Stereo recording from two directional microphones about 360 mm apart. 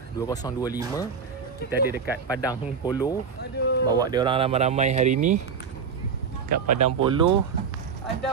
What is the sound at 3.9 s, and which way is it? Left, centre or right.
Speech, centre.